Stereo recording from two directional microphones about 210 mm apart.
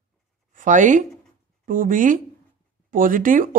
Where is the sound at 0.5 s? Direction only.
35° right (ahead or behind).